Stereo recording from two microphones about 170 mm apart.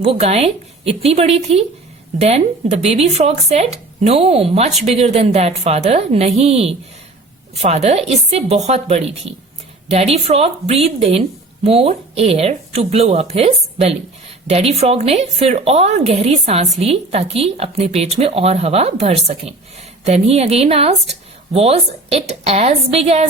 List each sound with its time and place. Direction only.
0.0 s a woman's voice: 35° right (ahead or behind)